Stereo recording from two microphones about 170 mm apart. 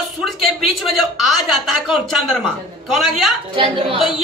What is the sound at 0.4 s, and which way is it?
A woman's voice, centre (ahead or behind).